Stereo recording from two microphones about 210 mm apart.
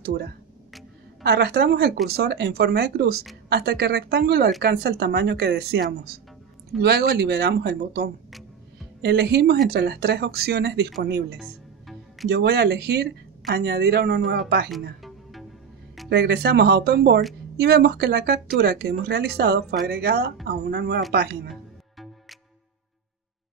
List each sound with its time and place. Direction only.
1.2 s speech: 50° right (ahead or behind)
16.1 s speech: 50° right (ahead or behind)
21.5 s music: centre (ahead or behind)